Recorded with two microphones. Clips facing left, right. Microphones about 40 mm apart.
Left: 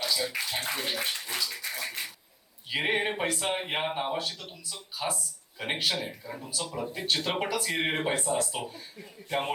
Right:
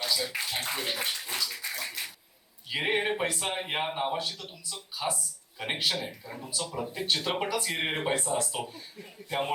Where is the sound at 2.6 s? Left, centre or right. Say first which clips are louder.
Even; centre.